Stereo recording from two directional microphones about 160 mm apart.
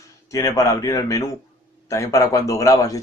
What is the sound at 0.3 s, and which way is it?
Speech, 20° left (ahead or behind).